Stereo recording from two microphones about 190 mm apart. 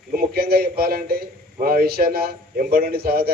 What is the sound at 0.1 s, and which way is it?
A man's voice, 55° right (ahead or behind).